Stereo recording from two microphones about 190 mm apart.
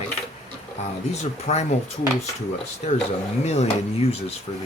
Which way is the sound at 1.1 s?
35° left (ahead or behind).